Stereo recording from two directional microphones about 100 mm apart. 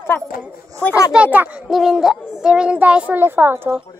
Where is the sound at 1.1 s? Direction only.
15° right (ahead or behind).